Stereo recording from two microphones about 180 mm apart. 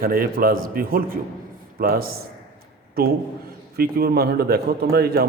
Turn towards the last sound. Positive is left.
turn(degrees=-60)  # may be behind; listen again after turning